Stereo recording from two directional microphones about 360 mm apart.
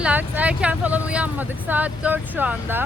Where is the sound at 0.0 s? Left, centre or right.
Centre.